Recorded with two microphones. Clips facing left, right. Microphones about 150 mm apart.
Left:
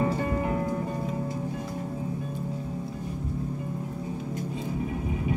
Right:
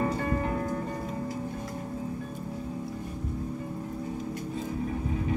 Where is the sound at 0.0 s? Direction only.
15° left (ahead or behind).